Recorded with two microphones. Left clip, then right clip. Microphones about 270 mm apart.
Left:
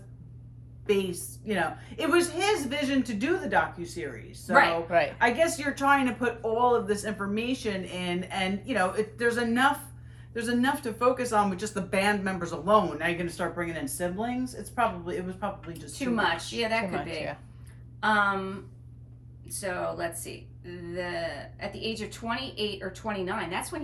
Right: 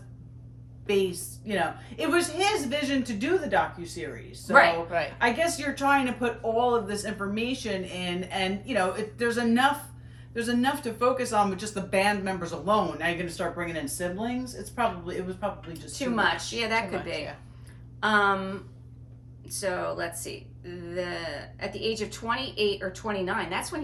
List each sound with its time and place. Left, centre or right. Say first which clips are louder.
0.9 s speech: right 1 dB; centre
4.9 s a woman's voice: left 4 dB; left
5.2 s speech: left 1 dB; centre
16.1 s speech: right 1 dB; centre
18.0 s speech: right 1 dB; centre